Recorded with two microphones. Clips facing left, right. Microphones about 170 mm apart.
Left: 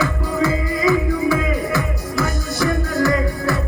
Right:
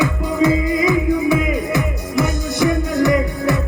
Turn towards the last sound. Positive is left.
turn(degrees=-20)  # may be behind; listen again after turning